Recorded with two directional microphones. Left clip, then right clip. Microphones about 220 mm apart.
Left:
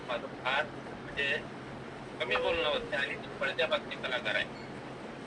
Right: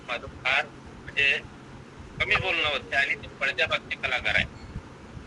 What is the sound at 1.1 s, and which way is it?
Speech, 90° right.